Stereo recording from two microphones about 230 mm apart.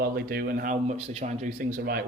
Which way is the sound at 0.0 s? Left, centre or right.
Right.